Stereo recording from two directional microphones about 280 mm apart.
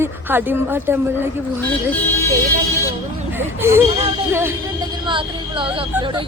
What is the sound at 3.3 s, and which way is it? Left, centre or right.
Speech, centre.